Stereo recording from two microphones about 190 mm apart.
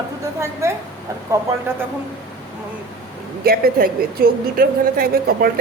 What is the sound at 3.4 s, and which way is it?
Speech, 50° right (ahead or behind).